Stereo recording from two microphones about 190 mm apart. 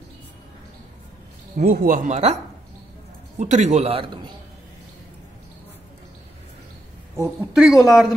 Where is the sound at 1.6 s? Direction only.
50° right (ahead or behind).